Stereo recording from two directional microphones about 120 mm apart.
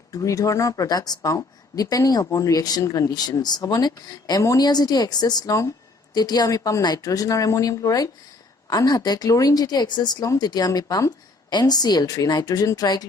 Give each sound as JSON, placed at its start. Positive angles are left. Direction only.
{"t": 0.1, "sound": "speech", "side_deg": 30}